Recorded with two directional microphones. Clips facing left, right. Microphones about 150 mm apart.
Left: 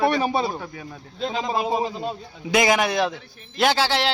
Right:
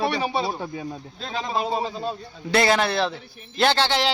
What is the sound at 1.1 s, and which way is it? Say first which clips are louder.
A man's voice: left 3 dB; 20° left (ahead or behind).